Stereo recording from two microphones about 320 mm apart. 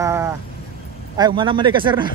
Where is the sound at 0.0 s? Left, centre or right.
Centre.